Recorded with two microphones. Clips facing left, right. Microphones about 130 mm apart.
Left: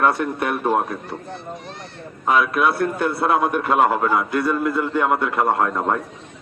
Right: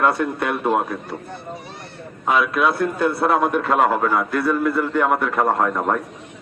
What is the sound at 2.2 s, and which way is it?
Speech, centre (ahead or behind).